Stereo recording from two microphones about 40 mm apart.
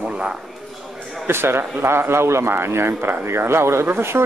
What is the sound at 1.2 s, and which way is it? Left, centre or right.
Speech, right.